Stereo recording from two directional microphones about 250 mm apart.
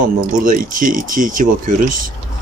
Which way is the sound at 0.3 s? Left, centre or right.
Right.